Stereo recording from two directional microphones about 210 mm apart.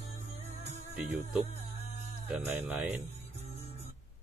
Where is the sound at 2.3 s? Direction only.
10° right (ahead or behind).